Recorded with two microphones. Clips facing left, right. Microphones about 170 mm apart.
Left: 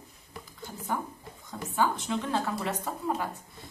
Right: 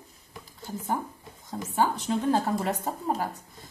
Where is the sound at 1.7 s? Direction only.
40° right (ahead or behind).